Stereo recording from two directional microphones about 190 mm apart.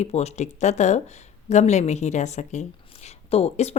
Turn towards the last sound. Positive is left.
turn(degrees=35)  # may be behind; listen again after turning